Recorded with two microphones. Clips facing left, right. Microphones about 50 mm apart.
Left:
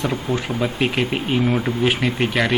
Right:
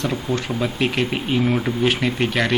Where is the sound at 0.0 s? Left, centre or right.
Centre.